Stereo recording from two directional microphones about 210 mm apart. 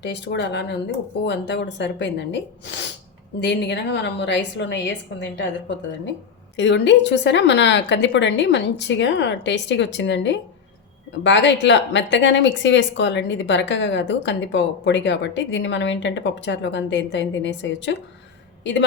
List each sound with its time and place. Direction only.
0.0 s a woman's voice: 55° left (ahead or behind)